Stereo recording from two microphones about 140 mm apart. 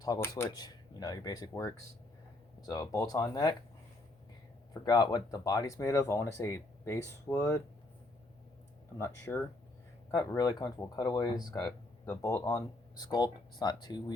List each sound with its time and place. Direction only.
0.2 s speech: 25° left (ahead or behind)
4.7 s speech: 30° left (ahead or behind)
9.0 s speech: 20° left (ahead or behind)